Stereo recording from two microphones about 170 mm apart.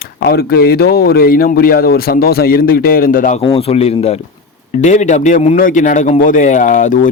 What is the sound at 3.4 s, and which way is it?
Speech, 35° left (ahead or behind).